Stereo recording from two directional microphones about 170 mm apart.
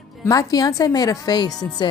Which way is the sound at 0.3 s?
20° left (ahead or behind).